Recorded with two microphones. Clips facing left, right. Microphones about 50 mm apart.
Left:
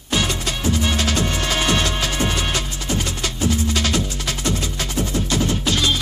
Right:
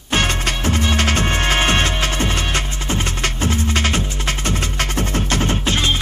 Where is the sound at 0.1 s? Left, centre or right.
Right.